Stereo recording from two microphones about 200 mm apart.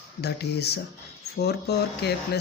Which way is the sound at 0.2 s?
55° left (ahead or behind).